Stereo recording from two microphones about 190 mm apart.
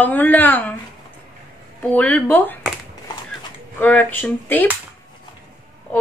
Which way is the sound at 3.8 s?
10° left (ahead or behind).